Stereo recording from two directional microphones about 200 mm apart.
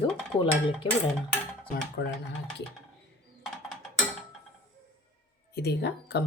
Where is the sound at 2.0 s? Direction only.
60° left (ahead or behind).